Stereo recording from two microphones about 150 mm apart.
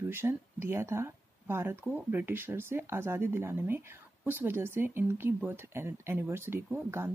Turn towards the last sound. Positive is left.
turn(degrees=-15)  # may be behind; listen again after turning